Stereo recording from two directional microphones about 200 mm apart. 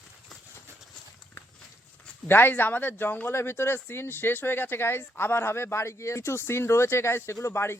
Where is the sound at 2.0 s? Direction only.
10° left (ahead or behind).